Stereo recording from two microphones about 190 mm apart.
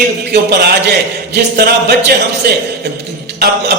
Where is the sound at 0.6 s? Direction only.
60° right (ahead or behind).